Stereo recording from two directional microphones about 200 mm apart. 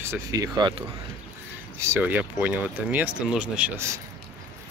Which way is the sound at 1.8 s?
10° right (ahead or behind).